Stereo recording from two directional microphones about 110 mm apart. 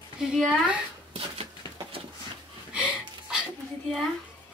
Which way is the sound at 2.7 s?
5° right (ahead or behind).